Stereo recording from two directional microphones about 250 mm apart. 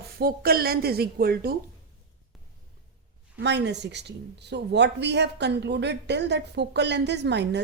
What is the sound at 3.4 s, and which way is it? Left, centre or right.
Speech, right.